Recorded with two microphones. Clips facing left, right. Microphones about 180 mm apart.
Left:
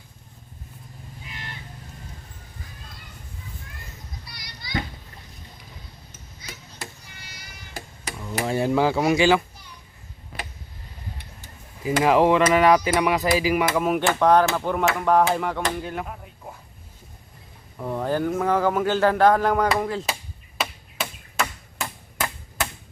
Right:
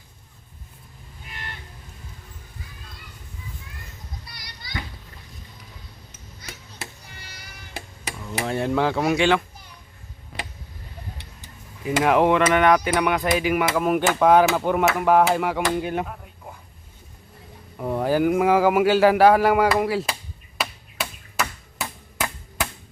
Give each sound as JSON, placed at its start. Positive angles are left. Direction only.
{"t": 1.2, "sound": "vehicle", "side_deg": -55}
{"t": 8.3, "sound": "a sound", "side_deg": 5}
{"t": 11.9, "sound": "chop", "side_deg": 0}
{"t": 15.7, "sound": "speech", "side_deg": -20}
{"t": 17.7, "sound": "speech", "side_deg": -10}
{"t": 20.6, "sound": "chop", "side_deg": -5}